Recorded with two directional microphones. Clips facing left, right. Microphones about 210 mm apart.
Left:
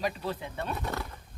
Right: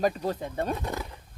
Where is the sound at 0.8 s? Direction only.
15° right (ahead or behind).